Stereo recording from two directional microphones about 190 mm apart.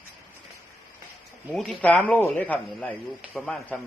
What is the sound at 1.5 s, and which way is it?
Speech, centre (ahead or behind).